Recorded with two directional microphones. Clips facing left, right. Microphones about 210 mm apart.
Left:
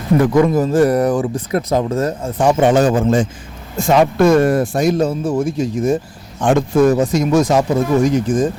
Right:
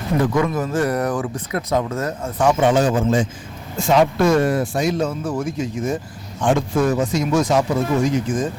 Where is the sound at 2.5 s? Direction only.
50° left (ahead or behind).